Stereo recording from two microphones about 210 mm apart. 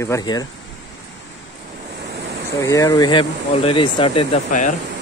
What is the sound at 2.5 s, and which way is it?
Speech, 15° left (ahead or behind).